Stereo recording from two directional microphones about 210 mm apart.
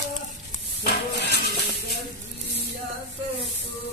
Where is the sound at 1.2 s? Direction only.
50° left (ahead or behind).